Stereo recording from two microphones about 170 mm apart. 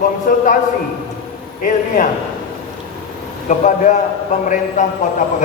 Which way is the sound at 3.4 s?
45° left (ahead or behind).